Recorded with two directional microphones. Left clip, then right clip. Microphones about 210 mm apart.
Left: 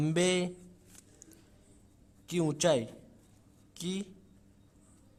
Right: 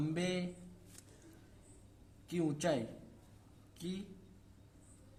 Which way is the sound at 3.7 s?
40° left (ahead or behind).